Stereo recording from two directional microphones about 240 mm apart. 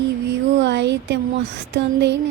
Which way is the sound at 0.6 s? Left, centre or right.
Right.